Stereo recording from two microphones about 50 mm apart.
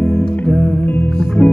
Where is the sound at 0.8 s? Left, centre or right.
Left.